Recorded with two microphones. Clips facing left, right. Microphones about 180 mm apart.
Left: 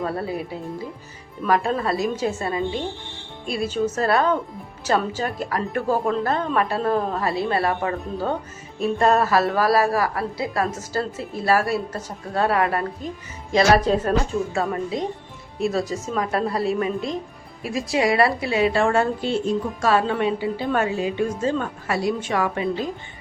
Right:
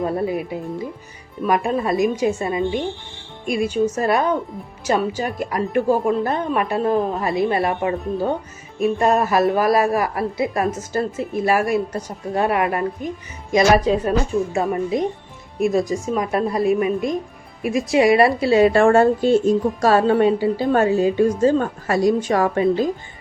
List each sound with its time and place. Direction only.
0.0 s a woman's voice: 15° right (ahead or behind)
1.5 s a woman's voice: 15° right (ahead or behind)
18.4 s speech: 45° right (ahead or behind)